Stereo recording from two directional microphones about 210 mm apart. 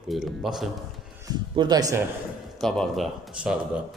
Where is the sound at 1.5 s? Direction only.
20° right (ahead or behind).